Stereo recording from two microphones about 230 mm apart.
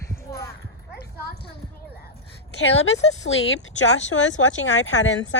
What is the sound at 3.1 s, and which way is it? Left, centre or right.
Speech, left.